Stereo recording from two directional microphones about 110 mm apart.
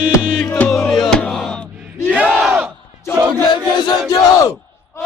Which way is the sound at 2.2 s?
5° right (ahead or behind).